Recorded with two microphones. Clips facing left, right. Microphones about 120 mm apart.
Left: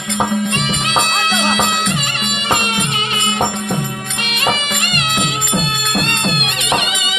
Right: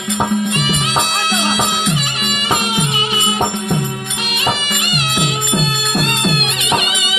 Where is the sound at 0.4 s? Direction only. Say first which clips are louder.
Right 1 dB; 5° right (ahead or behind).